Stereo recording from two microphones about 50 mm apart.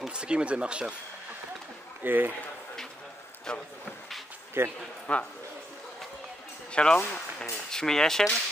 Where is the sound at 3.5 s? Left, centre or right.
Centre.